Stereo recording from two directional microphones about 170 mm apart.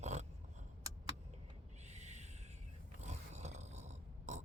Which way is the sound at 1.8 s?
40° right (ahead or behind).